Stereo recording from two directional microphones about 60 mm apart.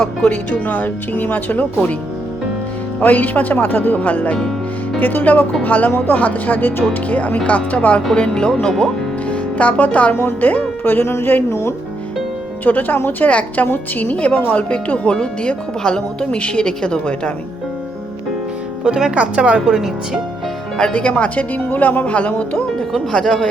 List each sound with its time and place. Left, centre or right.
0.0 s speech: centre
3.0 s speech: left
8.1 s a woman's voice: centre
18.9 s speech: centre
19.1 s a woman's voice: right
20.7 s speech: centre
22.5 s a woman's voice: centre